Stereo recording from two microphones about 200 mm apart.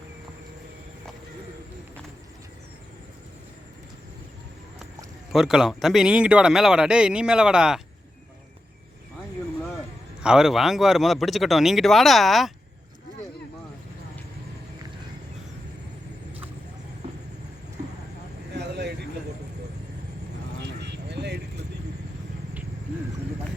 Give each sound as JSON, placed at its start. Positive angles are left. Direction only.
{"t": 5.3, "sound": "speech", "side_deg": 0}
{"t": 10.2, "sound": "speech", "side_deg": 0}
{"t": 18.5, "sound": "vehicle", "side_deg": -55}
{"t": 20.7, "sound": "vehicle", "side_deg": -60}